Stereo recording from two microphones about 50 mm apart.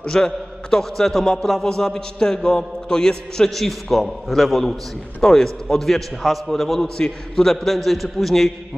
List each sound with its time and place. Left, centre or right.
0.0 s a man's voice: centre